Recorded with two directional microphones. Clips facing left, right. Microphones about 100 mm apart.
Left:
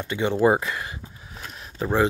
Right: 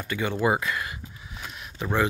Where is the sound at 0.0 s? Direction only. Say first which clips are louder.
Left 5 dB; 25° left (ahead or behind).